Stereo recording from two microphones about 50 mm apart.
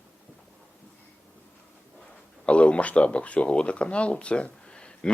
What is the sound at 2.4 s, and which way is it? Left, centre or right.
Speech, left.